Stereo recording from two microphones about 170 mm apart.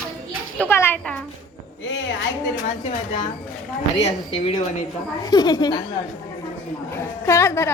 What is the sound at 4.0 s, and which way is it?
Speech, 35° left (ahead or behind).